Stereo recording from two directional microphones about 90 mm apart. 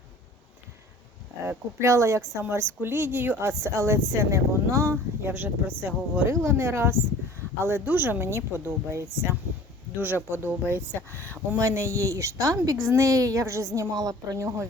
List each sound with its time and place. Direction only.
1.5 s speech: 30° right (ahead or behind)
3.6 s speech: 30° right (ahead or behind)
5.3 s speech: 25° right (ahead or behind)